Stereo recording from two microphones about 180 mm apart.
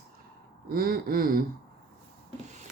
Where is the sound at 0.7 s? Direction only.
55° right (ahead or behind).